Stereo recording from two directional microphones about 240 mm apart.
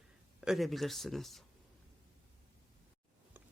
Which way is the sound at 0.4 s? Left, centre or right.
Centre.